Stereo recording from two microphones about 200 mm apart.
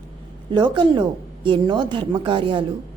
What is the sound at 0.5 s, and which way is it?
A woman's voice, 25° right (ahead or behind).